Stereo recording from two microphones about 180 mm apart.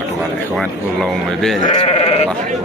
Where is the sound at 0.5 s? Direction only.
Centre (ahead or behind).